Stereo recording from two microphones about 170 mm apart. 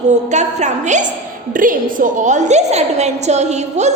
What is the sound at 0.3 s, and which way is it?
A woman's voice, 45° right (ahead or behind).